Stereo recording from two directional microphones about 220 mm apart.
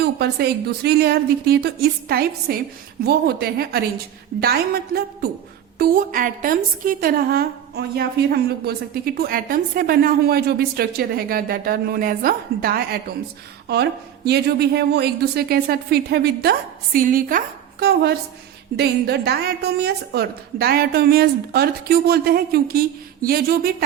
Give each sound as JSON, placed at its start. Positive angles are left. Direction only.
{"t": 0.0, "sound": "a woman's voice", "side_deg": -45}
{"t": 14.3, "sound": "a woman's voice", "side_deg": -45}